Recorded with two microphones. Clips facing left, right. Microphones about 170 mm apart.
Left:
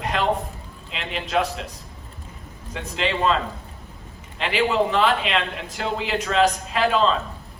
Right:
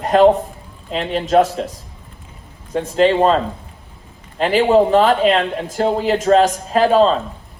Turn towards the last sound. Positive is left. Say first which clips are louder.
# right 7 dB
turn(degrees=-40)  # may be behind; listen again after turning